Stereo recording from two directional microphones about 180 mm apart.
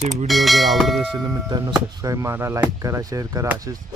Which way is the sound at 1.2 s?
20° right (ahead or behind).